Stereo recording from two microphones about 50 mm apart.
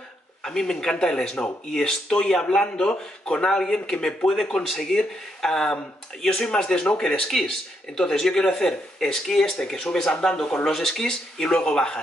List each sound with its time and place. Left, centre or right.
0.4 s speech: centre